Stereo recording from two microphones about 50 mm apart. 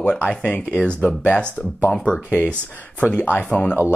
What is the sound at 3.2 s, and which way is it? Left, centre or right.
Speech, left.